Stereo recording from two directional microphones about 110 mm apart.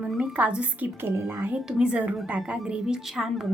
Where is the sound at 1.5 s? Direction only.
10° right (ahead or behind).